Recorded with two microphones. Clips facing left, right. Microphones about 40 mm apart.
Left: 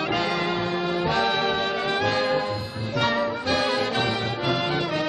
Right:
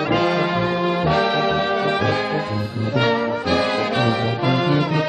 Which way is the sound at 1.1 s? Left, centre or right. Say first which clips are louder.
Right 4 dB; centre.